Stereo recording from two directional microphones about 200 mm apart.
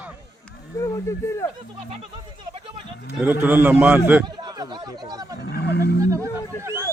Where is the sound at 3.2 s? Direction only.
10° right (ahead or behind).